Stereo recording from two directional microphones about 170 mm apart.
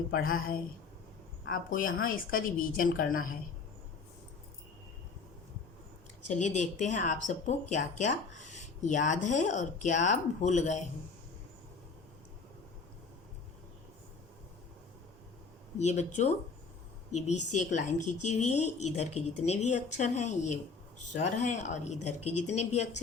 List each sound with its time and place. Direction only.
0.1 s a woman's voice: 60° left (ahead or behind)
6.2 s speech: 45° left (ahead or behind)
15.8 s speech: 40° left (ahead or behind)
17.5 s speech: 45° left (ahead or behind)